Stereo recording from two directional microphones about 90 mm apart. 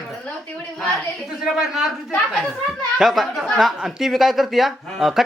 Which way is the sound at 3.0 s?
Centre (ahead or behind).